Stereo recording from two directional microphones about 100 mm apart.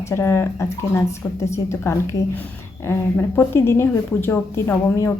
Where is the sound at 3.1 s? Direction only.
25° left (ahead or behind).